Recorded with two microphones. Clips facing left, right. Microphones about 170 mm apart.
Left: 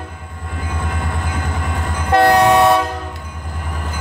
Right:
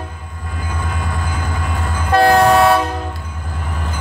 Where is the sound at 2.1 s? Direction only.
20° left (ahead or behind).